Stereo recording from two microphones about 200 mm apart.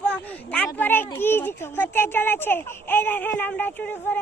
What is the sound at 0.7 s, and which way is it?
Speech, 10° left (ahead or behind).